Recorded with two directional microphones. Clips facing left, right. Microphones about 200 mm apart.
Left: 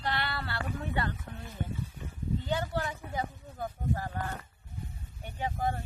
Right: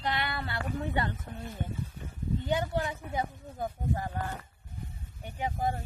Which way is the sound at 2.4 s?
15° right (ahead or behind).